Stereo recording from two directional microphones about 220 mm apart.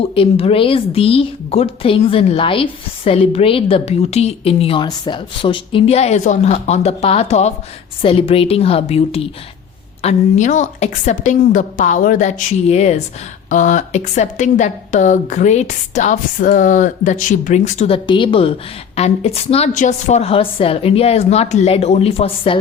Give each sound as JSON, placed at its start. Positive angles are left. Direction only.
{"t": 0.0, "sound": "a woman's voice", "side_deg": 25}